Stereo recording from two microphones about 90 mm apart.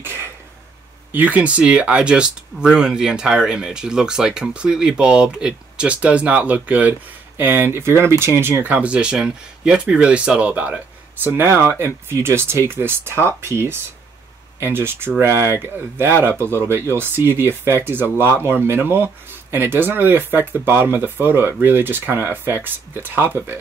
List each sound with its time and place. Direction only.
0.0 s throat clearing: 25° right (ahead or behind)
1.1 s speech: 15° right (ahead or behind)
8.7 s speech: 10° right (ahead or behind)
11.2 s speech: 25° right (ahead or behind)